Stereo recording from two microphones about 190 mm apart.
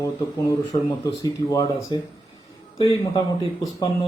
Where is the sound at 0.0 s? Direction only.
15° left (ahead or behind).